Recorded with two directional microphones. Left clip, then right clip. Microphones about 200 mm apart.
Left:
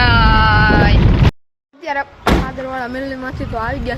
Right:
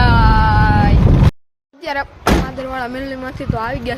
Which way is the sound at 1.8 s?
15° right (ahead or behind).